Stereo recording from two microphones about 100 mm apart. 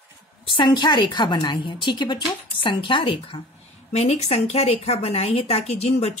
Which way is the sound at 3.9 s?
90° left.